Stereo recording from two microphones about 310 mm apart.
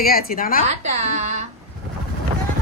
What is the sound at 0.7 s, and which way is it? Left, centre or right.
Speech, right.